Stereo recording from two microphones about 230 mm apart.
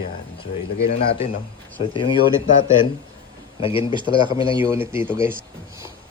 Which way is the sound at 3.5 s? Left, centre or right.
Left.